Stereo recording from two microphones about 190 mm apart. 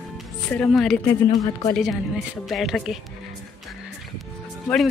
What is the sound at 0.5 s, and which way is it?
Speech, 5° left (ahead or behind).